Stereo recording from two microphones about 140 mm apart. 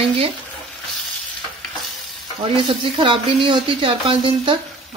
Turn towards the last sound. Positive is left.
turn(degrees=-40)  # may be behind; listen again after turning